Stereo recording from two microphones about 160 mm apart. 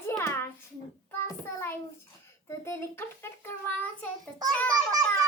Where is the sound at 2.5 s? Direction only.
15° left (ahead or behind).